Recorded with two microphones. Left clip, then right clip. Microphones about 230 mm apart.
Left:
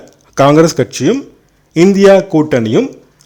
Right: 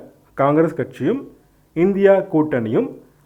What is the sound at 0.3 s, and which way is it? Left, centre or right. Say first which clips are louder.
A man's voice: left 9 dB; left.